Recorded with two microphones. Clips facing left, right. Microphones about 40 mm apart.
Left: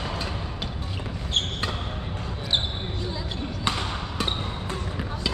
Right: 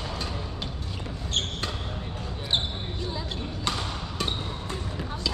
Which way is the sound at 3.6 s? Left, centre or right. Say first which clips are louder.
Left 3 dB; left.